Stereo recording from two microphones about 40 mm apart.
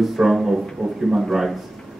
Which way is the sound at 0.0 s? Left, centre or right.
Centre.